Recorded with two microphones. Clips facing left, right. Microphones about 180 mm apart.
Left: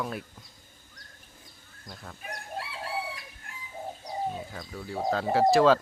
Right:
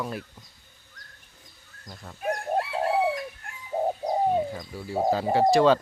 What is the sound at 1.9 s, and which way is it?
Speech, 5° right (ahead or behind).